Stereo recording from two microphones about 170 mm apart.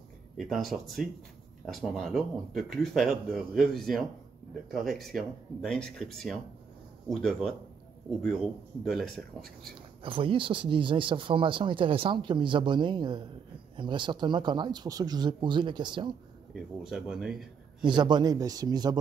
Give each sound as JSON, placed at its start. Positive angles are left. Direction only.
{"t": 0.4, "sound": "speech", "side_deg": 0}
{"t": 8.8, "sound": "speech", "side_deg": 0}
{"t": 10.0, "sound": "speech", "side_deg": -30}
{"t": 16.5, "sound": "speech", "side_deg": -5}
{"t": 17.8, "sound": "speech", "side_deg": -25}